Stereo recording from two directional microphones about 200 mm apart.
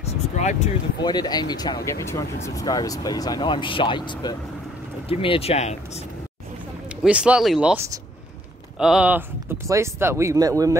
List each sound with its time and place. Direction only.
0.4 s speech: 35° left (ahead or behind)
1.0 s speech: 20° left (ahead or behind)
7.0 s speech: 5° right (ahead or behind)